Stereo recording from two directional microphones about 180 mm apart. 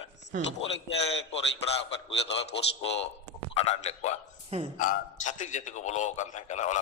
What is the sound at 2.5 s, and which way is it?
Speech, 75° left (ahead or behind).